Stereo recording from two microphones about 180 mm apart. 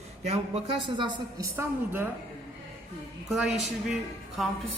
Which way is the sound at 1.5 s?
10° right (ahead or behind).